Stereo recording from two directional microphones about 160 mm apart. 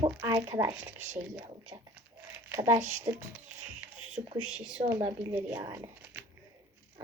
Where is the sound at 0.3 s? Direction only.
20° right (ahead or behind).